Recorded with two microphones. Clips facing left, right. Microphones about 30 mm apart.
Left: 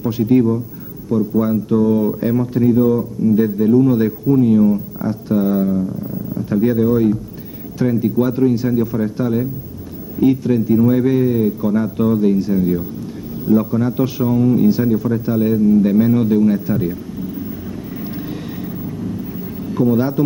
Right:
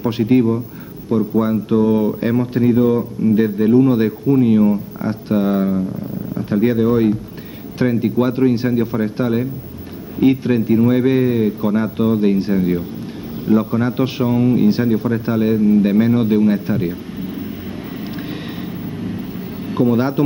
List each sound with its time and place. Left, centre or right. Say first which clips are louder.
0.0 s a man's voice: even; right
19.7 s a man's voice: even; right